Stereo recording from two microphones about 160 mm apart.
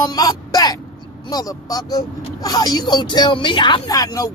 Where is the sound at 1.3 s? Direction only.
25° left (ahead or behind).